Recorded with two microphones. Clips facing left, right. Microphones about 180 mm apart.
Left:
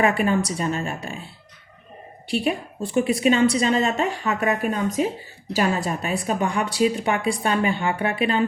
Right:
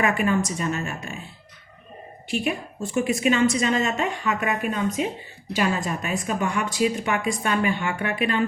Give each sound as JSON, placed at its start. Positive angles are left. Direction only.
{"t": 0.0, "sound": "speech", "side_deg": 35}
{"t": 2.2, "sound": "speech", "side_deg": 35}